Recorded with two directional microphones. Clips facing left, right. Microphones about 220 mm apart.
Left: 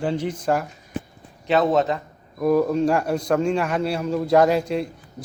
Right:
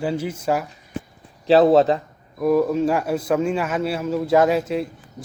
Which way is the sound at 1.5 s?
35° right (ahead or behind).